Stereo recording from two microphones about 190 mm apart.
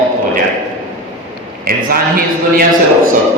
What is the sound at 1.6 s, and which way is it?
Speech, 50° right (ahead or behind).